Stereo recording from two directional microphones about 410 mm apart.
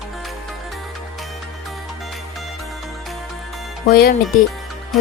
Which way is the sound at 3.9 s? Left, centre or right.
Left.